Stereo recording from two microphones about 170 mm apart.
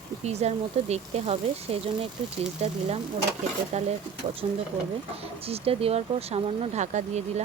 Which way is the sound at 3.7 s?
40° right (ahead or behind).